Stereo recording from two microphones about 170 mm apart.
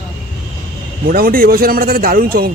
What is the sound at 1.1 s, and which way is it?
Speech, 60° right (ahead or behind).